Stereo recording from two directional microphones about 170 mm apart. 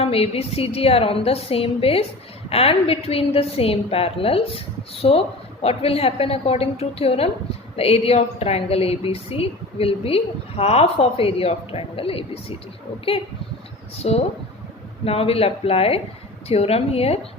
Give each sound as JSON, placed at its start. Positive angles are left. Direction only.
{"t": 0.0, "sound": "a woman's voice", "side_deg": 35}
{"t": 14.0, "sound": "a woman's voice", "side_deg": 40}